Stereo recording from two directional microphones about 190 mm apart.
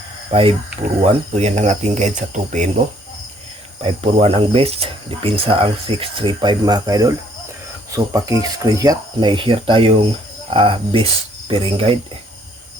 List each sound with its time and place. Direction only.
0.3 s speech: 30° right (ahead or behind)
3.8 s speech: 30° right (ahead or behind)